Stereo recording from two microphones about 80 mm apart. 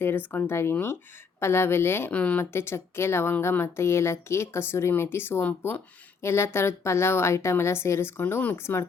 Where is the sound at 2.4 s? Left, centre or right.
Left.